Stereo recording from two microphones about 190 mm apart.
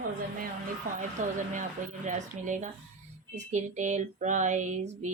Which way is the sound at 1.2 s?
40° right (ahead or behind).